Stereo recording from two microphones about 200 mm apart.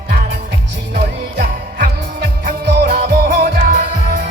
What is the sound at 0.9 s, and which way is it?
Music, 45° right (ahead or behind).